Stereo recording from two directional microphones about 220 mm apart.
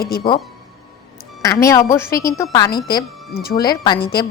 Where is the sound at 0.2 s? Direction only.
20° left (ahead or behind).